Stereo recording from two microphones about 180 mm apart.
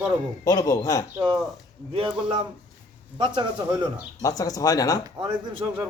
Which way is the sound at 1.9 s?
30° right (ahead or behind).